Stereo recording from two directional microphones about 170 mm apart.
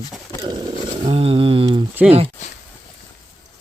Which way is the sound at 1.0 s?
35° right (ahead or behind).